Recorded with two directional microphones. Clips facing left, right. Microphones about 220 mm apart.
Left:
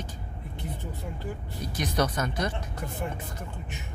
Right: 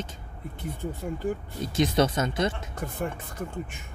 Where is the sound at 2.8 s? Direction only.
50° right (ahead or behind).